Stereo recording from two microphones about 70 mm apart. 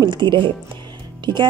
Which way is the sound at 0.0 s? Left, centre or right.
Right.